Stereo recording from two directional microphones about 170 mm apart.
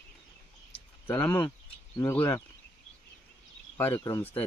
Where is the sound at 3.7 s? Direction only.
15° left (ahead or behind).